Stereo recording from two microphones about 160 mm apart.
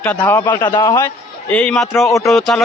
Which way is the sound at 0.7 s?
25° left (ahead or behind).